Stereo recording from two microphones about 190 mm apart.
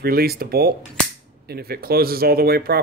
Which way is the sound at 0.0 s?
55° right (ahead or behind).